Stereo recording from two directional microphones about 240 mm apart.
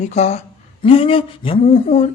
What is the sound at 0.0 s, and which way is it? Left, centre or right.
Speech, left.